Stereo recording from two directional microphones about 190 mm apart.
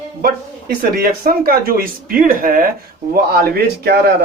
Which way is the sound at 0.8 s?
50° right (ahead or behind).